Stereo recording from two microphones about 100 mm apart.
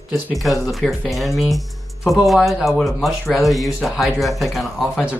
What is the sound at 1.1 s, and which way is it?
Speech, centre (ahead or behind).